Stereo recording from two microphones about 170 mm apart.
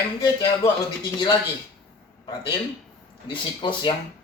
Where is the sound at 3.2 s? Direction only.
30° left (ahead or behind).